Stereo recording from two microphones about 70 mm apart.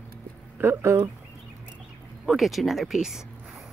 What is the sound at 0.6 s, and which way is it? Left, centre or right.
Speech, right.